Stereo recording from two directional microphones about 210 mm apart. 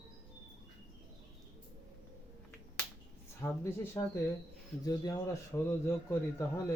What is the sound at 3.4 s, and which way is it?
A man's voice, 15° left (ahead or behind).